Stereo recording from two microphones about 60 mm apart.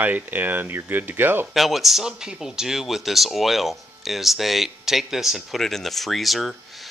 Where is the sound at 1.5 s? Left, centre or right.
Centre.